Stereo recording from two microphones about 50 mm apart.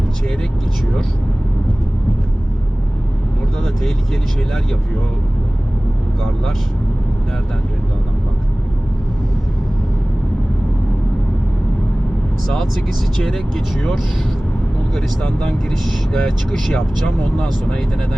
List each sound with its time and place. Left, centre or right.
12.5 s speech: centre
16.1 s speech: centre